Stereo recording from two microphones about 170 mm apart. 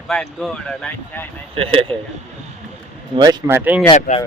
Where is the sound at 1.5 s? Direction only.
35° right (ahead or behind).